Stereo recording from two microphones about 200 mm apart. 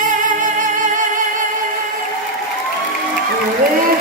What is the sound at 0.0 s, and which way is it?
Music, 40° right (ahead or behind).